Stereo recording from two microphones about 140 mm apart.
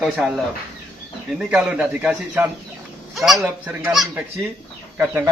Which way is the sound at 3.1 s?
Centre (ahead or behind).